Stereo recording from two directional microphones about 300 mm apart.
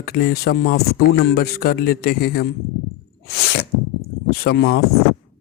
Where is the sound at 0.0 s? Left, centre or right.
Left.